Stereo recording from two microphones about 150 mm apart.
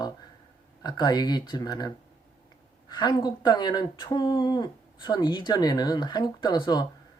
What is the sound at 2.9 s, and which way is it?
Speech, 30° left (ahead or behind).